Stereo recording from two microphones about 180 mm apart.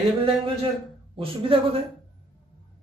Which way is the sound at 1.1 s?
30° right (ahead or behind).